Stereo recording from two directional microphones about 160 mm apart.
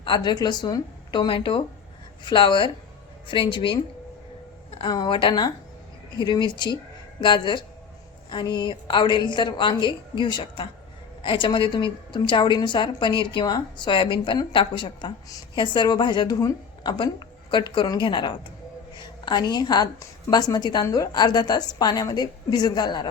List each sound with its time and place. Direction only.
0.0 s a woman's voice: 25° left (ahead or behind)
4.8 s a woman's voice: 30° left (ahead or behind)